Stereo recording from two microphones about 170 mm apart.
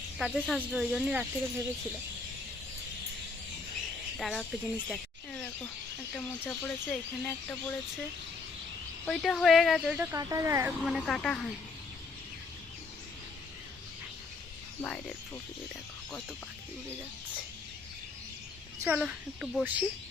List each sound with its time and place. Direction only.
0.2 s speech: centre (ahead or behind)
4.2 s speech: centre (ahead or behind)
4.9 s a sound: 5° left (ahead or behind)
6.1 s speech: 5° left (ahead or behind)
9.0 s speech: centre (ahead or behind)
10.2 s speech: 20° right (ahead or behind)
10.8 s speech: centre (ahead or behind)
14.8 s speech: 10° left (ahead or behind)
18.9 s speech: 5° right (ahead or behind)